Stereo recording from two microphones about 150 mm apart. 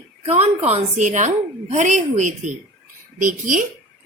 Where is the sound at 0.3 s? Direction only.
45° right (ahead or behind).